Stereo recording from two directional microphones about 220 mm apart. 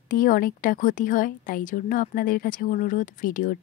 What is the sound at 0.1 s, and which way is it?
A woman's voice, 40° left (ahead or behind).